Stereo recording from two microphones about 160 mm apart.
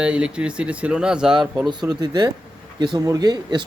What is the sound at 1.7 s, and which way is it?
Speech, 25° right (ahead or behind).